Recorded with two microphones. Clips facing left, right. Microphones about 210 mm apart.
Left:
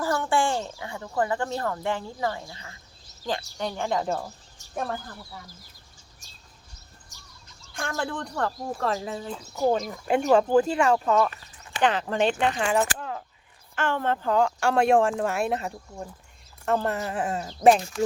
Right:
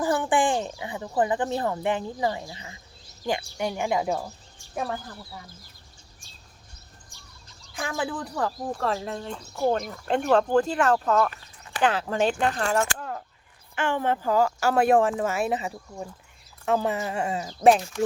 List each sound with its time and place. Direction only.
0.0 s speech: 15° right (ahead or behind)
7.1 s bird: 40° left (ahead or behind)
7.7 s speech: 5° right (ahead or behind)
13.7 s speech: 15° right (ahead or behind)